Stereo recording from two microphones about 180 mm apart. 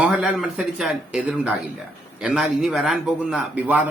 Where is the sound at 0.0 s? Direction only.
5° right (ahead or behind).